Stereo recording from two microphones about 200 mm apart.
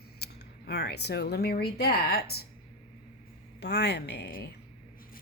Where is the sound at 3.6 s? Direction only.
55° left (ahead or behind).